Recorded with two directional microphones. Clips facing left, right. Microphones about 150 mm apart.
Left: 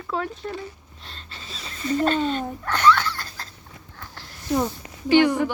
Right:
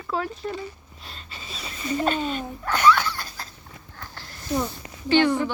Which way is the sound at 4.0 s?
Centre (ahead or behind).